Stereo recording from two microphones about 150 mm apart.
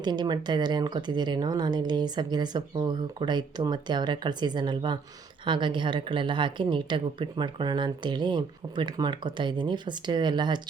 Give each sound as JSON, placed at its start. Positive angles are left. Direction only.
{"t": 0.0, "sound": "speech", "side_deg": -30}